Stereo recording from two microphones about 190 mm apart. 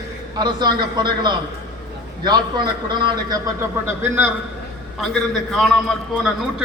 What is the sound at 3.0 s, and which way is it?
Speech, 20° right (ahead or behind).